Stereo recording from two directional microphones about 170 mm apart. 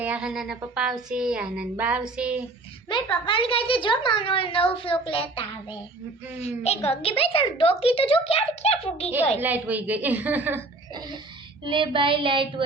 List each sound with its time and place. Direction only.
0.0 s speech: 5° right (ahead or behind)
2.9 s a woman's voice: 30° left (ahead or behind)
6.6 s a woman's voice: 35° left (ahead or behind)
9.4 s a woman's voice: 10° right (ahead or behind)
11.6 s child singing: 30° right (ahead or behind)